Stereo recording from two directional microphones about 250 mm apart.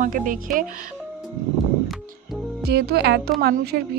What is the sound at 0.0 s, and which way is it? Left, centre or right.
Speech, right.